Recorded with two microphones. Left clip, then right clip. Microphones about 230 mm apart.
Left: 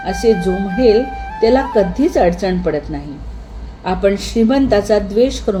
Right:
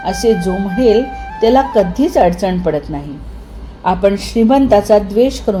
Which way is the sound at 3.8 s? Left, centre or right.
Centre.